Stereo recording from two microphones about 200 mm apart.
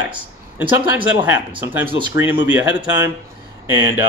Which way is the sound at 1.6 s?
10° right (ahead or behind).